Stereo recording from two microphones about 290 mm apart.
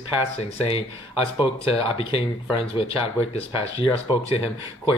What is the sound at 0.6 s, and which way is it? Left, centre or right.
Speech, centre.